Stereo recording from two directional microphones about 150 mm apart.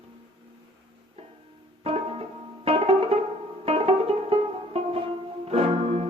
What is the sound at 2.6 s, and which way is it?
Music, 40° right (ahead or behind).